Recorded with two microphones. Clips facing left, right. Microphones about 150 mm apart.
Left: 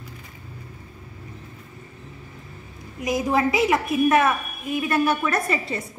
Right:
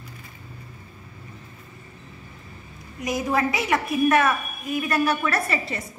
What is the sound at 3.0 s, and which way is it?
A woman's voice, 25° left (ahead or behind).